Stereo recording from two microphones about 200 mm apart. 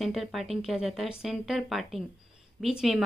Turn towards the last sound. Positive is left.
turn(degrees=0)  # may be behind; listen again after turning